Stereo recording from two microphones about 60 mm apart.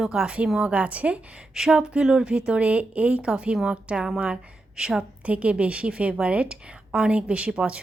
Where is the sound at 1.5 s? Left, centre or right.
Centre.